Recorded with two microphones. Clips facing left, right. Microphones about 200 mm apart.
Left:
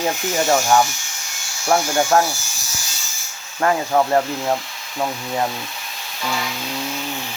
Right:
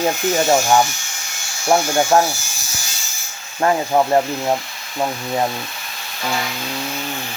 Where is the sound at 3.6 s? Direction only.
20° right (ahead or behind).